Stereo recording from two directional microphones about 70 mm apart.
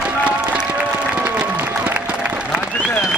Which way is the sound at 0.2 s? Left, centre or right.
Centre.